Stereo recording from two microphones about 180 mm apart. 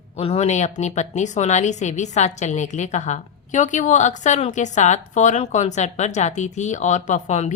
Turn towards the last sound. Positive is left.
turn(degrees=40)  # may be behind; listen again after turning